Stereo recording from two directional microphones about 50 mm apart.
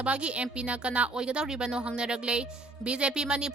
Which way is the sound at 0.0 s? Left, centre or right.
Right.